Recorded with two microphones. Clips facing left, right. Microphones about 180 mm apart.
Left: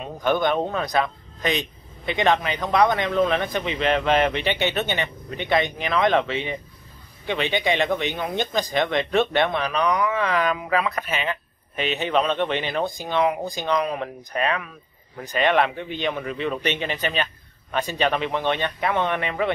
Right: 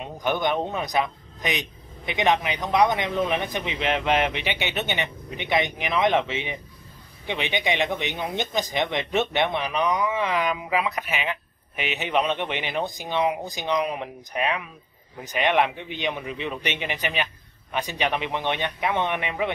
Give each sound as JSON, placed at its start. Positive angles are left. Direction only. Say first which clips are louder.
{"t": 0.0, "sound": "a man's voice", "louder": "left 3 dB", "side_deg": -15}